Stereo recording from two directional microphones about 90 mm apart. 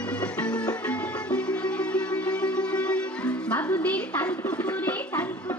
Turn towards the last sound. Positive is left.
turn(degrees=15)  # may be behind; listen again after turning